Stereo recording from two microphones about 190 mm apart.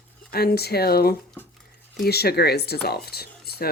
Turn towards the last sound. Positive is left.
turn(degrees=55)  # may be behind; listen again after turning